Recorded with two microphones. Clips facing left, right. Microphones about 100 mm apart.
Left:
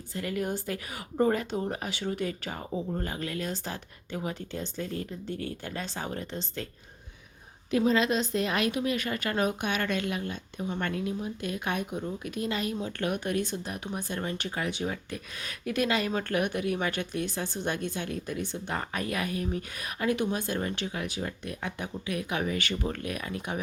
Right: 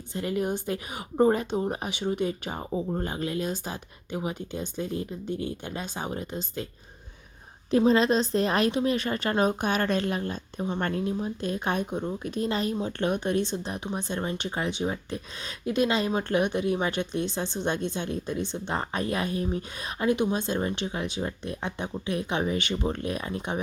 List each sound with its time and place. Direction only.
0.1 s speech: 20° right (ahead or behind)
7.7 s a woman's voice: 30° right (ahead or behind)